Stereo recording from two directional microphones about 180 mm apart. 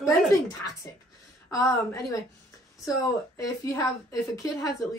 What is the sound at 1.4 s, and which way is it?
A woman's voice, 15° left (ahead or behind).